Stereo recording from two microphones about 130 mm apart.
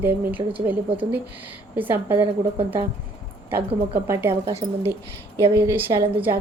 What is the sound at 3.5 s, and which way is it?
A woman's voice, 15° right (ahead or behind).